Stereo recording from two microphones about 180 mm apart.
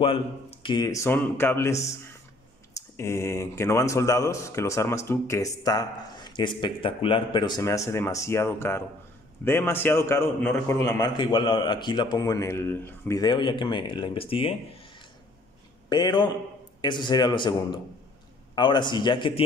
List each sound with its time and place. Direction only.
0.0 s speech: 30° left (ahead or behind)
3.0 s a man's voice: 15° left (ahead or behind); by 14.5 s 30° left (ahead or behind)
15.9 s a man's voice: 25° left (ahead or behind)